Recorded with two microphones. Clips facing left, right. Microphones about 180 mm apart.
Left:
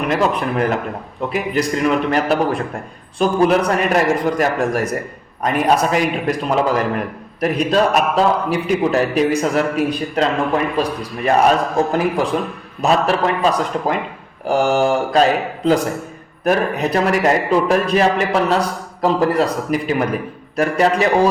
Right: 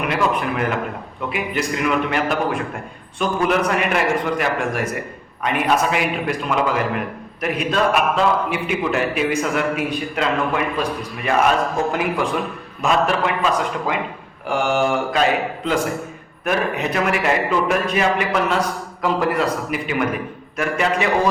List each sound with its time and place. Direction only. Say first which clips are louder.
1.3 s a man's voice: left 4 dB; 35° left (ahead or behind)